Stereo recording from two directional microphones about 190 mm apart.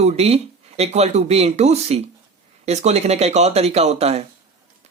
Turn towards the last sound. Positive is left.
turn(degrees=-35)  # may be behind; listen again after turning